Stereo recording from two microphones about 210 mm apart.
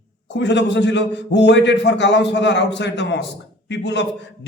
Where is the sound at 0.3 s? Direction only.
55° left (ahead or behind).